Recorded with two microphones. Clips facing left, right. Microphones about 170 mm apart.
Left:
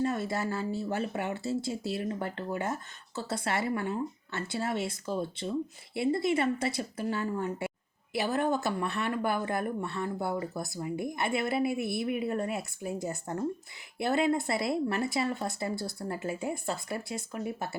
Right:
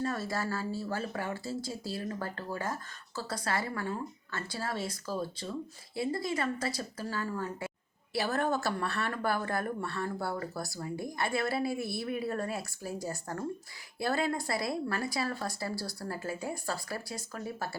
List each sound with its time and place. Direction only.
0.0 s speech: 20° left (ahead or behind)